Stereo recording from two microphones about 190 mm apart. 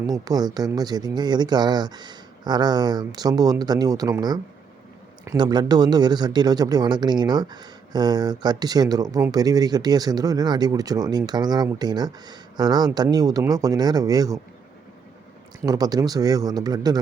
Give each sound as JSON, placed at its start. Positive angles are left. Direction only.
{"t": 0.1, "sound": "speech", "side_deg": -20}
{"t": 15.6, "sound": "speech", "side_deg": -20}